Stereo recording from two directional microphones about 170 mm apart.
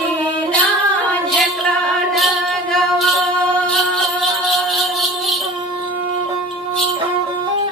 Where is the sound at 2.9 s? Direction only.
Centre (ahead or behind).